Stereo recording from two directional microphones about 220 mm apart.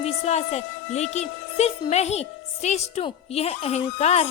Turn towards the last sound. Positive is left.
turn(degrees=30)  # may be behind; listen again after turning